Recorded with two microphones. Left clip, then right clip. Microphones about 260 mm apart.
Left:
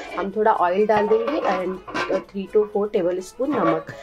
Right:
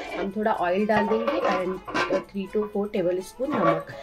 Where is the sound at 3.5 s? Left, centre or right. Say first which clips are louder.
Left 2 dB; centre.